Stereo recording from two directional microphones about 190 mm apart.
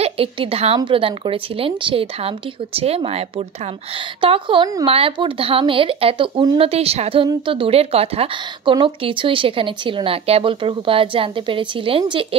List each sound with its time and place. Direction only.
0.0 s a woman's voice: 30° right (ahead or behind)